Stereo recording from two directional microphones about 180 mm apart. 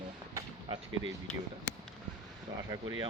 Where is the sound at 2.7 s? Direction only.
25° right (ahead or behind).